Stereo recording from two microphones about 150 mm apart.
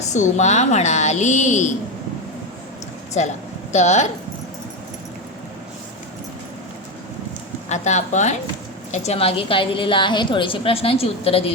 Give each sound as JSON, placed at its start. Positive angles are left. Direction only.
{"t": 0.1, "sound": "a woman's voice", "side_deg": 50}
{"t": 3.2, "sound": "a woman's voice", "side_deg": 50}
{"t": 7.7, "sound": "a woman's voice", "side_deg": 50}